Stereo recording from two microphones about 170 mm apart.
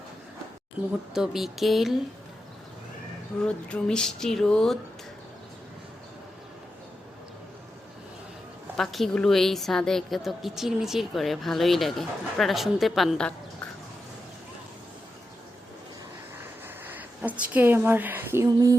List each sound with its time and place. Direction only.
1.1 s a woman's voice: centre (ahead or behind)
3.4 s a woman's voice: 5° left (ahead or behind)
8.7 s a woman's voice: centre (ahead or behind)
16.6 s speech: 10° right (ahead or behind)